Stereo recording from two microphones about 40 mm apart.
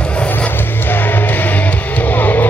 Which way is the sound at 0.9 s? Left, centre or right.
Left.